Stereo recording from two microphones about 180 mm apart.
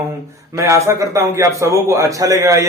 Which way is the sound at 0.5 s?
15° right (ahead or behind).